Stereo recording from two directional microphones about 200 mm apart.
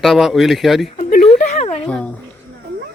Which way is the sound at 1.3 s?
35° left (ahead or behind).